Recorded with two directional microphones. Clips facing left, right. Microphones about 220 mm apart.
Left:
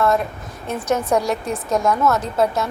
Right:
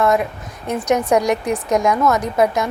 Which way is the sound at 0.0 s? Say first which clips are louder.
Right 2 dB; 15° right (ahead or behind).